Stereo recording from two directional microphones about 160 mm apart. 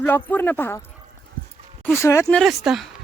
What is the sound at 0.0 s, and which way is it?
Speech, 10° left (ahead or behind).